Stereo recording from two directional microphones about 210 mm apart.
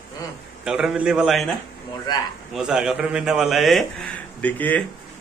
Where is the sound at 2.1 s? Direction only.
20° left (ahead or behind).